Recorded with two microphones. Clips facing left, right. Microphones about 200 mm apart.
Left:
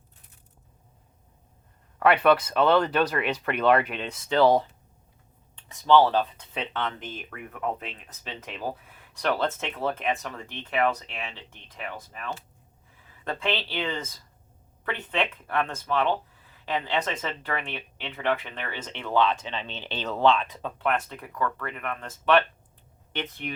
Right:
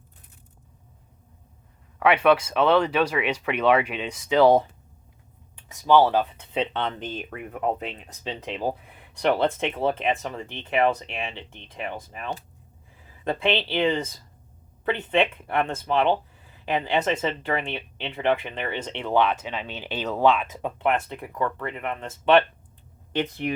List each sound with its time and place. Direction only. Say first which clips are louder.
2.0 s speech: right 1 dB; centre (ahead or behind)
5.5 s speech: right 1 dB; 10° right (ahead or behind)
6.6 s speech: right 5 dB; 25° right (ahead or behind)